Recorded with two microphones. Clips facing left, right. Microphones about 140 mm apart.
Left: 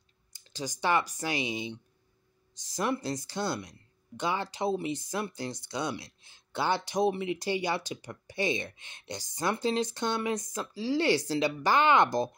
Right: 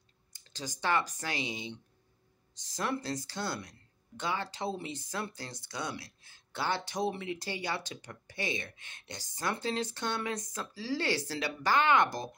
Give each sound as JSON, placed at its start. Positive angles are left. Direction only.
{"t": 0.5, "sound": "speech", "side_deg": 15}